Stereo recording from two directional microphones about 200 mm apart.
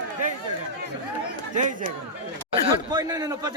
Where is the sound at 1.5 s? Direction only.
40° right (ahead or behind).